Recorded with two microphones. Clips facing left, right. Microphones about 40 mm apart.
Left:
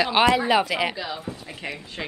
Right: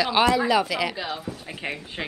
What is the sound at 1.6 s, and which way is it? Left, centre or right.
Speech, centre.